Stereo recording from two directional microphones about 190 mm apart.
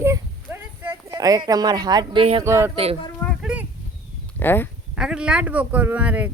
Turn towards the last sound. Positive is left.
turn(degrees=-10)  # may be behind; listen again after turning